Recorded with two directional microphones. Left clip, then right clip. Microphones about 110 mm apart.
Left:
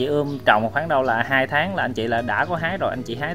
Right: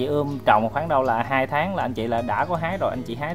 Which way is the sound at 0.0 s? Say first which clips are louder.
Left 2 dB; 15° left (ahead or behind).